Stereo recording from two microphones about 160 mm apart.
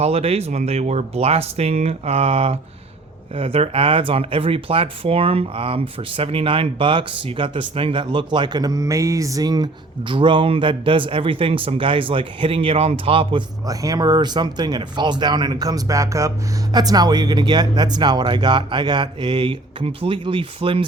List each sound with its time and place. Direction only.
0.0 s speech: 40° right (ahead or behind)
13.7 s speech: 20° right (ahead or behind)